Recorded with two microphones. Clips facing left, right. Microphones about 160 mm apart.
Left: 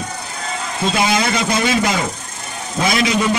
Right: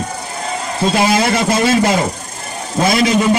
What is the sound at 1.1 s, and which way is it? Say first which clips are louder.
Speech: right 4 dB; 50° right (ahead or behind).